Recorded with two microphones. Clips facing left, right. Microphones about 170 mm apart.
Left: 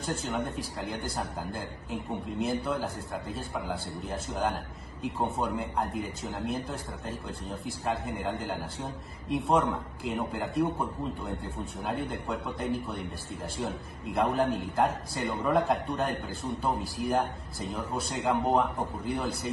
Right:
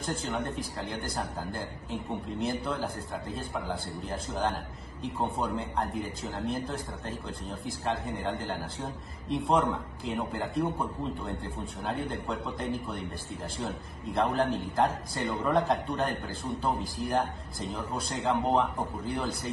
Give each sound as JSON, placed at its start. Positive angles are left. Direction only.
{"t": 0.3, "sound": "a man's voice", "side_deg": 0}